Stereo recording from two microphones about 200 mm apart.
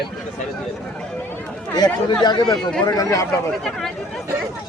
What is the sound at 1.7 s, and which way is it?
Speech, 20° left (ahead or behind).